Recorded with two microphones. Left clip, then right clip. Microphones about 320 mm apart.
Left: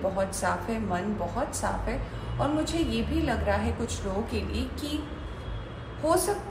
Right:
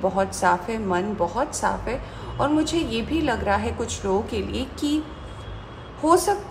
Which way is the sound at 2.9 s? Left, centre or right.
Right.